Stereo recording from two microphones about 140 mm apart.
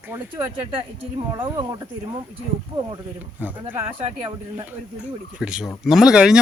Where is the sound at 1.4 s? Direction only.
30° right (ahead or behind).